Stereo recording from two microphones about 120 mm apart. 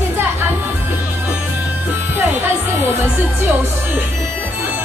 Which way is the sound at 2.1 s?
15° right (ahead or behind).